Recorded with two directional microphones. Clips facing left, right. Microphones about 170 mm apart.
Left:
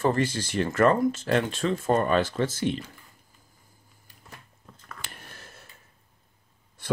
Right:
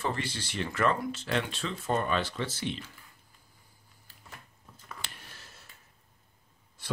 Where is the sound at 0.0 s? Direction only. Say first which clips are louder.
Left 9 dB; 45° left (ahead or behind).